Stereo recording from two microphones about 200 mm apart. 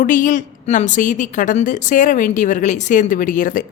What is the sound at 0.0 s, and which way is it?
A woman's voice, 40° left (ahead or behind).